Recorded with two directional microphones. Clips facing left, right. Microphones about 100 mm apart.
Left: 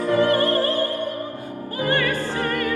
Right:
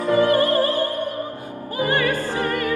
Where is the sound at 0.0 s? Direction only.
15° right (ahead or behind).